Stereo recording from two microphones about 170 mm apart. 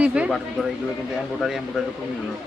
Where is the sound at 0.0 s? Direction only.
5° right (ahead or behind).